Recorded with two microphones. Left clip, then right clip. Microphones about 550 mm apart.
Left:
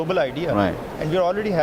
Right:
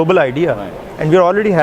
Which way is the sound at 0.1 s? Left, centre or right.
Right.